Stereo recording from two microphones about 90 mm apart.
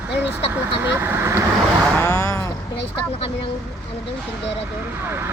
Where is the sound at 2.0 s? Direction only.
35° left (ahead or behind).